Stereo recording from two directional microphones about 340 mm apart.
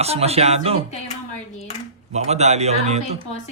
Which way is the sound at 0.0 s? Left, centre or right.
Centre.